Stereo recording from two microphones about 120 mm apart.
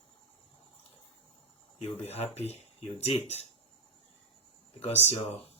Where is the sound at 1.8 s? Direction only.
60° left (ahead or behind).